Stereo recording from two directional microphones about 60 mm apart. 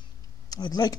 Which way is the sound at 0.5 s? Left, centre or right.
Left.